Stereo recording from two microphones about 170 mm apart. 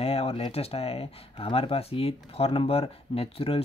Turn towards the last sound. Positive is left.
turn(degrees=35)  # may be behind; listen again after turning